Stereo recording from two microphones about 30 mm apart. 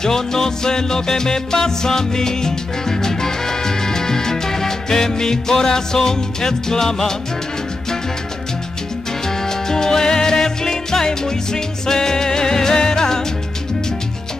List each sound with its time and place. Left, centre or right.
0.0 s music: centre
9.4 s music: centre